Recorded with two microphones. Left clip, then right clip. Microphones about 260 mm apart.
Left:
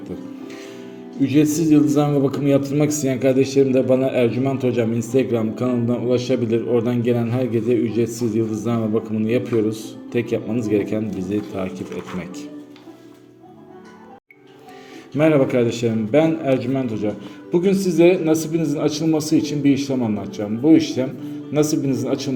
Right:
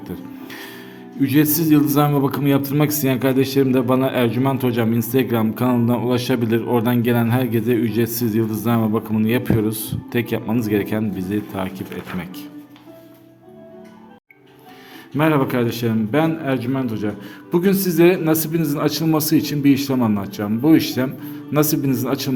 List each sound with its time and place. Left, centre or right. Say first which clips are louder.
0.0 s music: left 1 dB; right
1.2 s a man's voice: even; right
15.1 s a man's voice: left 2 dB; centre
19.4 s a man's voice: right 1 dB; right
20.1 s a man's voice: right 2 dB; right
21.5 s a man's voice: even; right